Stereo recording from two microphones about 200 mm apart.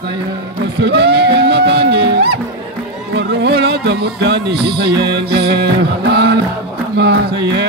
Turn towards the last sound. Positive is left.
turn(degrees=-55)  # may be behind; listen again after turning